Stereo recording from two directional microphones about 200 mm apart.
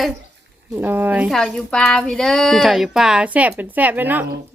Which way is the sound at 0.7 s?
10° right (ahead or behind).